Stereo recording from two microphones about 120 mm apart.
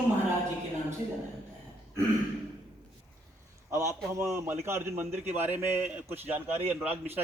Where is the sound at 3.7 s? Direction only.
25° right (ahead or behind).